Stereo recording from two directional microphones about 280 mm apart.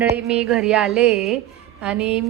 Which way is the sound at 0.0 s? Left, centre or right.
Centre.